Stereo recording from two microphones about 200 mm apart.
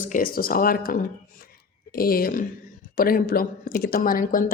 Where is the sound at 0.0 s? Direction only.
45° left (ahead or behind).